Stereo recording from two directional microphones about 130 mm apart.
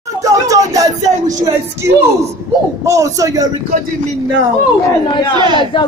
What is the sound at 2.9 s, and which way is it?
Speech, 25° right (ahead or behind).